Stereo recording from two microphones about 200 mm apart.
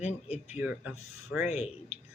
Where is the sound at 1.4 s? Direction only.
35° left (ahead or behind).